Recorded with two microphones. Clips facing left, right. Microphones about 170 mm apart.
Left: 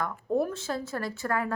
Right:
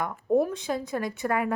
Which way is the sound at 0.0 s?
20° right (ahead or behind).